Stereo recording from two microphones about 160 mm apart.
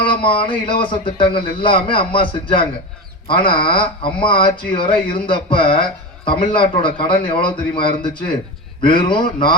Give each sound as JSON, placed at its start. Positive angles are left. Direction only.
{"t": 0.0, "sound": "speech", "side_deg": 30}